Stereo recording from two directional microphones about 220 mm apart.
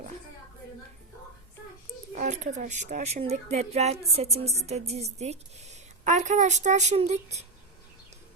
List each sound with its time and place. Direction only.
2.1 s a woman's voice: 30° right (ahead or behind)